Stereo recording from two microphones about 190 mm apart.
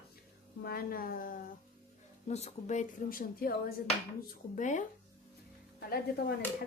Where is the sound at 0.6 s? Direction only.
50° left (ahead or behind).